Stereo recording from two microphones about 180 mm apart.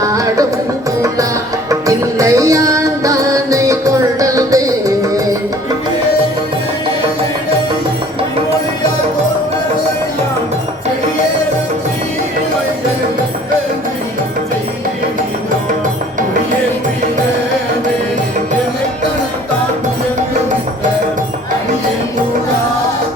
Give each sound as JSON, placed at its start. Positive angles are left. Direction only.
{"t": 0.0, "sound": "music", "side_deg": -20}
{"t": 1.9, "sound": "music", "side_deg": -20}